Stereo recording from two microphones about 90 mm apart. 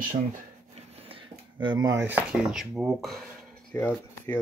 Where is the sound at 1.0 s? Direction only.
90° right.